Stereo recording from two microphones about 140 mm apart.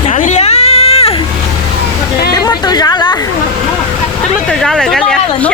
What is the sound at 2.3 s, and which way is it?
Chatter, 30° left (ahead or behind).